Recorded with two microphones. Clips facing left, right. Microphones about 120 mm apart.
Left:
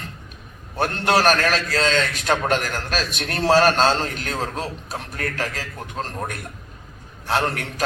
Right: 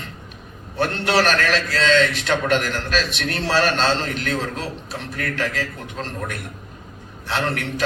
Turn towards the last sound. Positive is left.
turn(degrees=40)  # may be behind; listen again after turning